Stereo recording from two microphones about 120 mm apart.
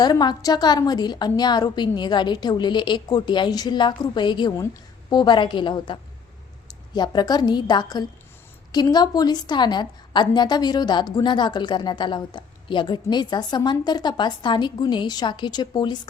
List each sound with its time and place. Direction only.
0.0 s a woman's voice: 35° left (ahead or behind)
4.5 s a sound: 25° left (ahead or behind)
5.1 s a woman's voice: 40° left (ahead or behind)